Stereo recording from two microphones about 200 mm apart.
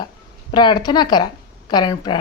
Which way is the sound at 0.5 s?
20° left (ahead or behind).